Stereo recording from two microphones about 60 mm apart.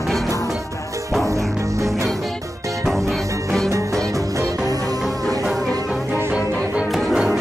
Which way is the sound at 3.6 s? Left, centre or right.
Right.